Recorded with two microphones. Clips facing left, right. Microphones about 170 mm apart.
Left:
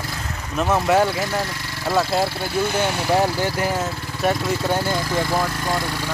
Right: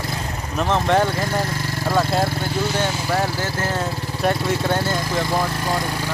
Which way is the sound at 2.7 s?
20° left (ahead or behind).